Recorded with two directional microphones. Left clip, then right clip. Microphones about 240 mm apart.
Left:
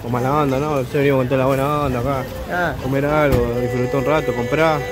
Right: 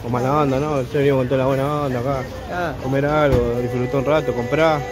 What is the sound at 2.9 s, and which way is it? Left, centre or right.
A man's voice, centre.